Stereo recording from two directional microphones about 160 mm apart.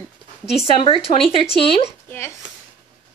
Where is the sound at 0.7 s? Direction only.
35° left (ahead or behind).